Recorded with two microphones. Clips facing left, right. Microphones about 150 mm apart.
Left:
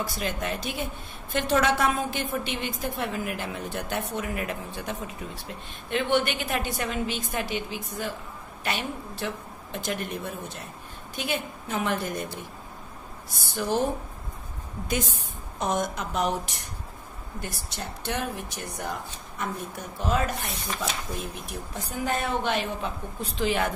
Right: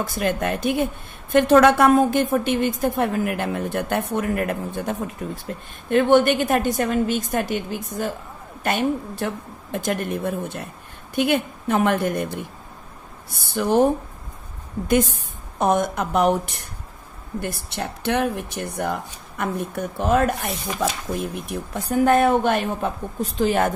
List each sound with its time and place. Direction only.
0.0 s a woman's voice: 50° right (ahead or behind)
13.6 s speech: 55° right (ahead or behind)
14.9 s a woman's voice: 55° right (ahead or behind)